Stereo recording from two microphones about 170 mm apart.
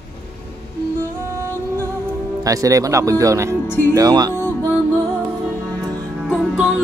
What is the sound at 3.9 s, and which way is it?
Speech, 25° right (ahead or behind).